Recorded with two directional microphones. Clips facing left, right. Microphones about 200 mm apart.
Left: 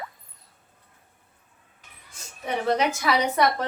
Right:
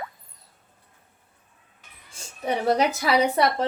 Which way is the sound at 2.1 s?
35° right (ahead or behind).